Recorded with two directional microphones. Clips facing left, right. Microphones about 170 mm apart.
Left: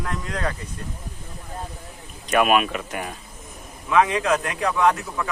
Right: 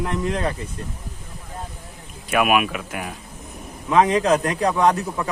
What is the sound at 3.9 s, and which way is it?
A man's voice, 35° right (ahead or behind).